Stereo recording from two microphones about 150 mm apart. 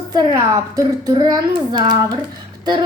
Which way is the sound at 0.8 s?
25° right (ahead or behind).